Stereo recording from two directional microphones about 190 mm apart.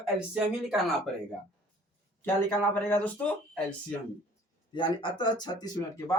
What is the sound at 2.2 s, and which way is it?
Speech, 10° left (ahead or behind).